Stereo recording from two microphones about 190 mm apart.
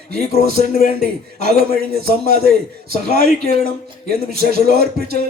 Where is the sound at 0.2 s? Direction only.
40° left (ahead or behind).